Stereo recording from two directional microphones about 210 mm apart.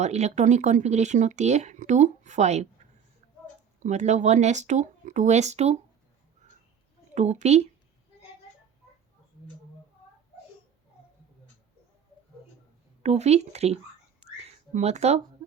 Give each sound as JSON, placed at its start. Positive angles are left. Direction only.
{"t": 0.0, "sound": "speech", "side_deg": -30}
{"t": 3.8, "sound": "speech", "side_deg": -35}
{"t": 7.1, "sound": "speech", "side_deg": -35}
{"t": 13.0, "sound": "speech", "side_deg": -30}
{"t": 14.4, "sound": "a sound", "side_deg": -30}